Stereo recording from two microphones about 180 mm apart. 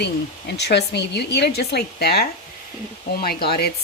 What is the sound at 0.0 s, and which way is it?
Speech, 70° left (ahead or behind).